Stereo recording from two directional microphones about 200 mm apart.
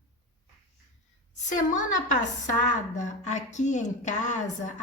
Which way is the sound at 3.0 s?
35° left (ahead or behind).